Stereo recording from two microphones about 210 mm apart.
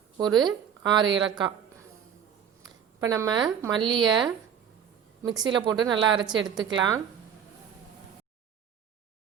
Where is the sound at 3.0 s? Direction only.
15° right (ahead or behind).